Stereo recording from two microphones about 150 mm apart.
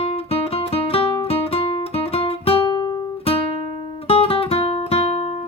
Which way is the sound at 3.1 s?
40° left (ahead or behind).